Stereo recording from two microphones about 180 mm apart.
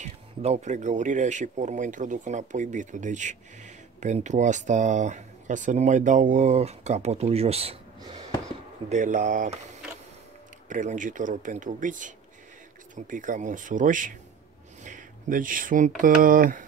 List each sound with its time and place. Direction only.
0.0 s speech: 40° right (ahead or behind)
8.0 s a sound: 25° right (ahead or behind)
8.8 s speech: 45° right (ahead or behind)
10.7 s speech: 45° right (ahead or behind)